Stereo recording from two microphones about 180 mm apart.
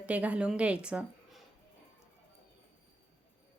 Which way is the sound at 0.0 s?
10° right (ahead or behind).